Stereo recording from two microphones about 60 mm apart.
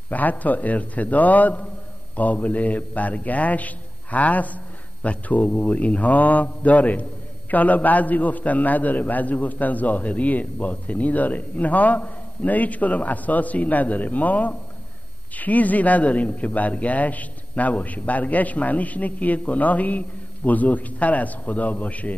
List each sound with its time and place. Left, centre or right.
0.1 s a man's voice: left